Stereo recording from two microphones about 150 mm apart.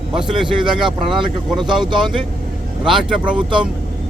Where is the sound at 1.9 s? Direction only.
30° right (ahead or behind).